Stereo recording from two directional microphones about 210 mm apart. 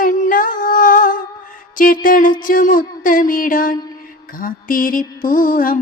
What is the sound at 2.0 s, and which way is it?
Mantra, 40° left (ahead or behind).